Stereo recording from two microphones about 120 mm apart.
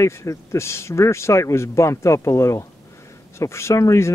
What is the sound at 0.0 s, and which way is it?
Speech, 25° left (ahead or behind).